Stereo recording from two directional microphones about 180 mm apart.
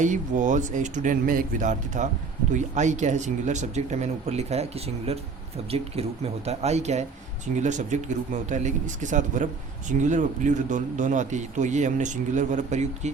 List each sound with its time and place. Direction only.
0.0 s speech: 45° right (ahead or behind)
5.7 s speech: 35° right (ahead or behind)